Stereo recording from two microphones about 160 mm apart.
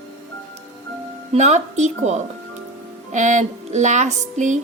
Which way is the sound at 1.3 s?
45° right (ahead or behind).